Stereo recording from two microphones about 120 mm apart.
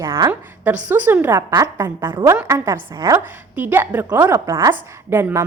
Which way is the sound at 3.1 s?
15° right (ahead or behind).